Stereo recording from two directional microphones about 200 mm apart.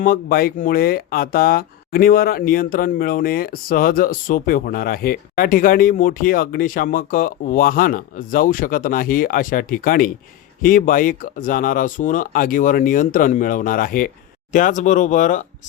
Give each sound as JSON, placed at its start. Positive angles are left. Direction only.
{"t": 0.0, "sound": "speech", "side_deg": 45}